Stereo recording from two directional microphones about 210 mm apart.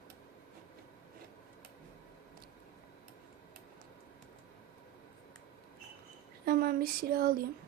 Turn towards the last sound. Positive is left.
turn(degrees=-45)  # may be behind; listen again after turning